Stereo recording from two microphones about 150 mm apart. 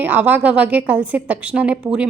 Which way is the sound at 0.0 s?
10° right (ahead or behind).